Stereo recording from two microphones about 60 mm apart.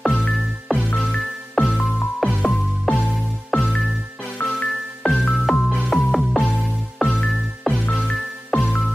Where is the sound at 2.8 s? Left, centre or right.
Centre.